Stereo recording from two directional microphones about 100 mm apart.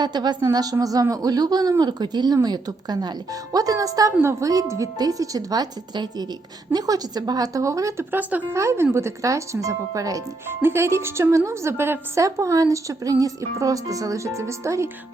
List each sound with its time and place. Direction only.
0.0 s a woman's voice: 45° right (ahead or behind)
8.1 s speech: 15° right (ahead or behind)
8.5 s a woman's voice: 25° right (ahead or behind)